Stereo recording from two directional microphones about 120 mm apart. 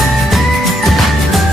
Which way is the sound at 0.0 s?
Centre (ahead or behind).